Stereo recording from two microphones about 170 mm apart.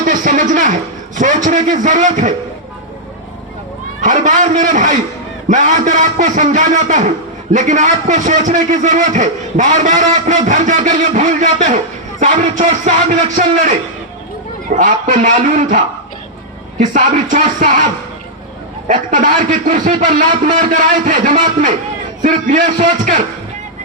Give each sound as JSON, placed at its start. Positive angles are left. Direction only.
{"t": 0.0, "sound": "a sound", "side_deg": -50}
{"t": 1.5, "sound": "a man's voice", "side_deg": -50}
{"t": 4.0, "sound": "a man's voice", "side_deg": -50}
{"t": 14.8, "sound": "a man's voice", "side_deg": -45}
{"t": 16.9, "sound": "a man's voice", "side_deg": -50}
{"t": 18.9, "sound": "a man's voice", "side_deg": -50}